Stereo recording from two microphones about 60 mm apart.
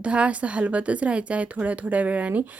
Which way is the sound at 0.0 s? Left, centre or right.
Centre.